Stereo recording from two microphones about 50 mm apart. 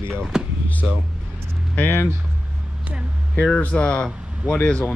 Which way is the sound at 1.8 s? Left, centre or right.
Left.